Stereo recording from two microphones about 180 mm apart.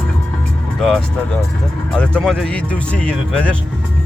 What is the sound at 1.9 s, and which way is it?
Speech, 5° left (ahead or behind).